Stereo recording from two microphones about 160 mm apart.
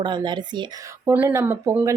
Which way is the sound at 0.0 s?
30° right (ahead or behind).